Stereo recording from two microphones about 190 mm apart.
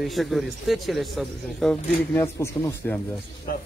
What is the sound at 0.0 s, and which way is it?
Speech, centre (ahead or behind).